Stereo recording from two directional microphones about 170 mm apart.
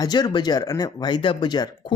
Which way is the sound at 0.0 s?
25° left (ahead or behind).